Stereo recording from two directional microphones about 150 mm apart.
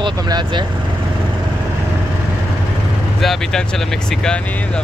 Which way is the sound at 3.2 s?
Centre (ahead or behind).